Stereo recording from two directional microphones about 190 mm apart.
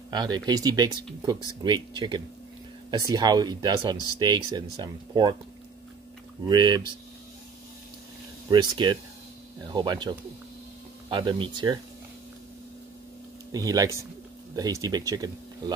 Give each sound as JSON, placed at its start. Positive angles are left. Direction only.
{"t": 0.1, "sound": "speech", "side_deg": -20}
{"t": 6.4, "sound": "speech", "side_deg": -20}
{"t": 8.5, "sound": "speech", "side_deg": -25}
{"t": 13.5, "sound": "speech", "side_deg": -20}